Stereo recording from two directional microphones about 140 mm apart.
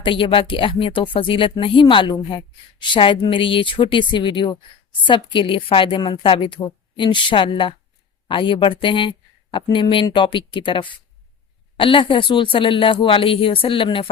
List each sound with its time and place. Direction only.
0.0 s a woman's voice: 40° left (ahead or behind)